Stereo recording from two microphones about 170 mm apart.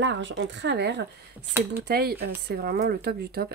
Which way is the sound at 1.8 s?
65° right (ahead or behind).